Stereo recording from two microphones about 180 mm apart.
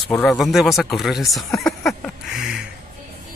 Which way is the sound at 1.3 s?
Centre (ahead or behind).